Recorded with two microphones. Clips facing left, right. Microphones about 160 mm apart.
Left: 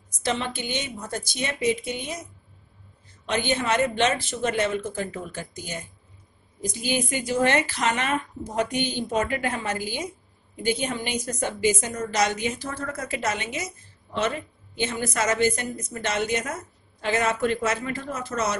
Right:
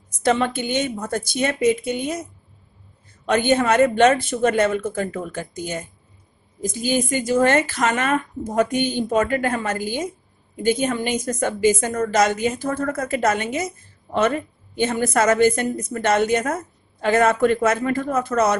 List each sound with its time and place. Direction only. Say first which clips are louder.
0.2 s a woman's voice: right 8 dB; 50° right (ahead or behind)
3.3 s a woman's voice: right 7 dB; 50° right (ahead or behind)